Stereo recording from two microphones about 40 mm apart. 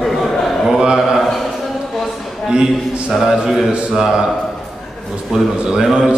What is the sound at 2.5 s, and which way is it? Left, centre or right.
Speech, right.